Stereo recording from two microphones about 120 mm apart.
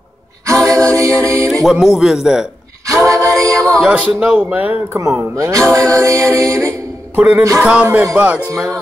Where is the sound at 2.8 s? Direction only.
25° right (ahead or behind).